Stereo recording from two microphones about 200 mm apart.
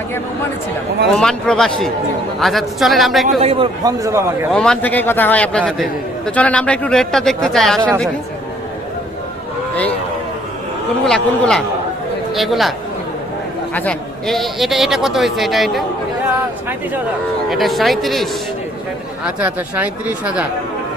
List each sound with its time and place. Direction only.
1.1 s a man's voice: 5° left (ahead or behind)
3.2 s a man's voice: 30° right (ahead or behind)
3.8 s speech: 15° right (ahead or behind)
4.5 s a man's voice: 5° left (ahead or behind)
11.0 s a man's voice: 5° left (ahead or behind)
13.7 s a man's voice: 5° left (ahead or behind)
17.5 s a man's voice: centre (ahead or behind)